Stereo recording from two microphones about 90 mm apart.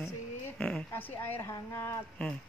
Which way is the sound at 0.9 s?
20° left (ahead or behind).